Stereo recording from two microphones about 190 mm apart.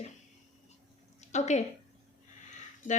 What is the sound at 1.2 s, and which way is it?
Speech, 35° left (ahead or behind).